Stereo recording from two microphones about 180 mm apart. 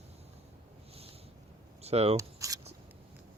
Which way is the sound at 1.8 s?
35° right (ahead or behind).